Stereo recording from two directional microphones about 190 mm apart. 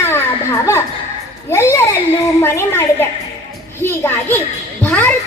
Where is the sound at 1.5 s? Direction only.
15° left (ahead or behind).